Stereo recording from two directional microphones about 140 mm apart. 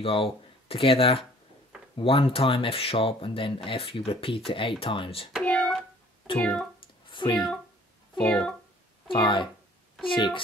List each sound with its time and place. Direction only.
0.0 s speech: 40° left (ahead or behind)
5.4 s a sound: 10° left (ahead or behind)
6.3 s speech: 10° left (ahead or behind)
7.1 s a sound: 35° left (ahead or behind)
8.2 s speech: 10° left (ahead or behind)
9.1 s speech: 35° left (ahead or behind)